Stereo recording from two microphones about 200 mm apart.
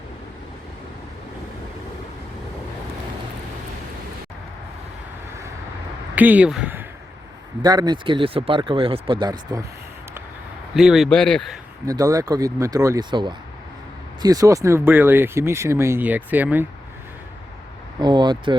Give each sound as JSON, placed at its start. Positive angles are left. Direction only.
{"t": 6.1, "sound": "speech", "side_deg": -10}
{"t": 7.6, "sound": "speech", "side_deg": -20}
{"t": 10.8, "sound": "speech", "side_deg": 0}
{"t": 11.9, "sound": "speech", "side_deg": -15}
{"t": 18.0, "sound": "speech", "side_deg": -20}